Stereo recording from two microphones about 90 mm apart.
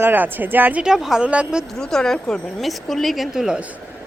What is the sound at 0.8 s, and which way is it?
Speech, 5° right (ahead or behind).